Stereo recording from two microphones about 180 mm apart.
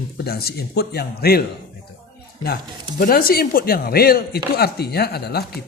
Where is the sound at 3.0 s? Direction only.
55° left (ahead or behind).